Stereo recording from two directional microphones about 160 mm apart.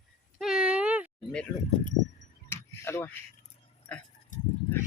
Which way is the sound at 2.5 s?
15° left (ahead or behind).